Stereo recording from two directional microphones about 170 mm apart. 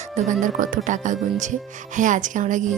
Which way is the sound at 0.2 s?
50° right (ahead or behind).